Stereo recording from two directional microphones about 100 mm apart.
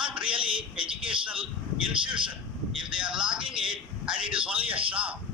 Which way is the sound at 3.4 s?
55° right (ahead or behind).